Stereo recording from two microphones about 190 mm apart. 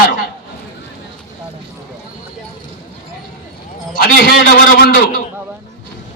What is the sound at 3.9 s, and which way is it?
A man's voice, 50° left (ahead or behind).